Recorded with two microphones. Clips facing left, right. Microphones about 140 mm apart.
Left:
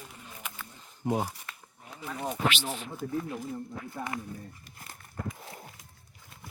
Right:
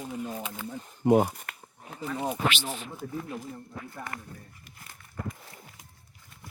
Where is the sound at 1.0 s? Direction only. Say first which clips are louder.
Right 8 dB; 65° right (ahead or behind).